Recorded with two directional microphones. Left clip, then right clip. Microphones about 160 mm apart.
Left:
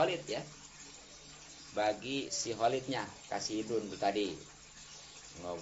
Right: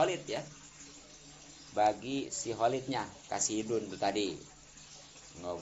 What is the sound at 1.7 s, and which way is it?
Speech, 5° right (ahead or behind).